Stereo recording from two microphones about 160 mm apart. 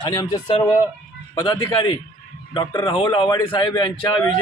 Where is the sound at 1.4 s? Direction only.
25° left (ahead or behind).